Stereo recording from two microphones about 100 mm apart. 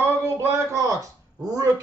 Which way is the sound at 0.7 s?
35° right (ahead or behind).